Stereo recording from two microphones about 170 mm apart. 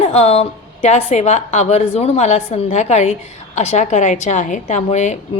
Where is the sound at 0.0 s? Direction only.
40° left (ahead or behind).